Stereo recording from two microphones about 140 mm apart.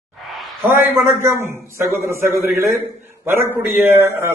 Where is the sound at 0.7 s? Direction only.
15° right (ahead or behind).